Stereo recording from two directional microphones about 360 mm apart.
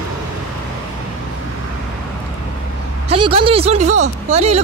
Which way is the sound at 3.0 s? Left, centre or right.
Centre.